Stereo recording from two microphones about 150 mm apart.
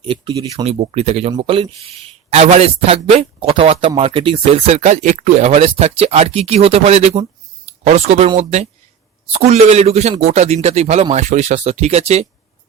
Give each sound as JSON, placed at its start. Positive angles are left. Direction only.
{"t": 0.0, "sound": "a man's voice", "side_deg": -35}